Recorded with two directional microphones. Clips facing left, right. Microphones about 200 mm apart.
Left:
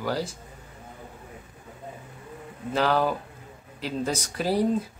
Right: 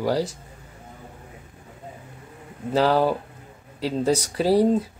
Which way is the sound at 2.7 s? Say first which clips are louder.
Right 4 dB; 35° right (ahead or behind).